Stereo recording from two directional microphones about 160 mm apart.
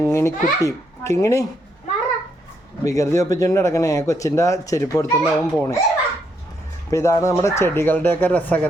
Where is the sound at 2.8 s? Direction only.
20° left (ahead or behind).